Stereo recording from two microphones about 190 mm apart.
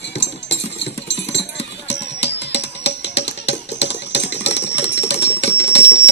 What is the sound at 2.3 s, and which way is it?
Music, 65° left (ahead or behind).